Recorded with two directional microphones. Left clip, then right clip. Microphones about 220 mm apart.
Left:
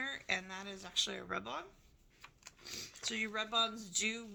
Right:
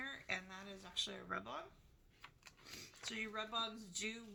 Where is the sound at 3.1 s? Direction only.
50° left (ahead or behind).